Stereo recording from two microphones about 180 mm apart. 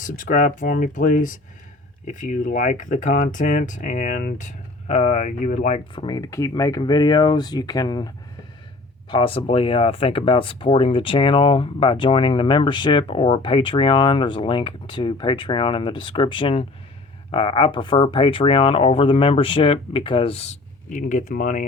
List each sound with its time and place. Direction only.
0.0 s speech: 45° left (ahead or behind)
5.9 s speech: 25° left (ahead or behind); by 21.7 s 50° left (ahead or behind)